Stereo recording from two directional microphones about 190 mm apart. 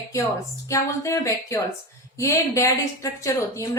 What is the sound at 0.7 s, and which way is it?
A woman's voice, 15° left (ahead or behind).